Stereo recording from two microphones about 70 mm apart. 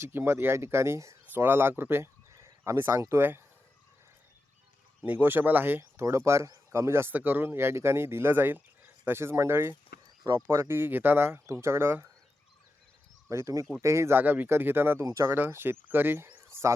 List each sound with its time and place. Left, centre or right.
0.0 s speech: right
1.3 s speech: right
5.0 s speech: right
6.0 s speech: right
7.1 s speech: right
13.2 s speech: right
14.2 s speech: right
15.0 s speech: right
15.4 s speech: right